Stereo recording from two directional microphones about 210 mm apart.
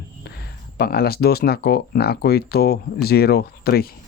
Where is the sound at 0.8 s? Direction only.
45° left (ahead or behind).